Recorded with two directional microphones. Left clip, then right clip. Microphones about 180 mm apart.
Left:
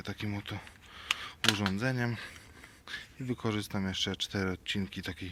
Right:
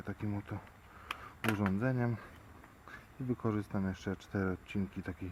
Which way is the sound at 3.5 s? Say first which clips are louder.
Left 4 dB; 5° left (ahead or behind).